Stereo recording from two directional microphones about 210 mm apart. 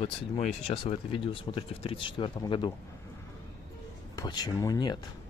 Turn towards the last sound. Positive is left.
turn(degrees=20)  # may be behind; listen again after turning